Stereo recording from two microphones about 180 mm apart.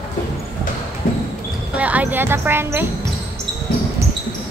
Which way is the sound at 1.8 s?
10° right (ahead or behind).